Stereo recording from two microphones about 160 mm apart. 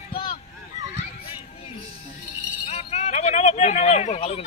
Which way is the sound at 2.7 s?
45° left (ahead or behind).